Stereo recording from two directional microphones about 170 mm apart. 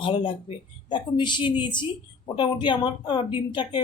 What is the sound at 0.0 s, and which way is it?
Speech, 30° left (ahead or behind).